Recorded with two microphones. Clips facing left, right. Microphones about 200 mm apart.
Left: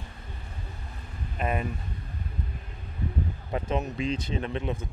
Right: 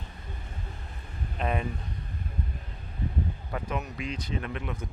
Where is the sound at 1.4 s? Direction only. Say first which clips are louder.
Left 1 dB; 5° left (ahead or behind).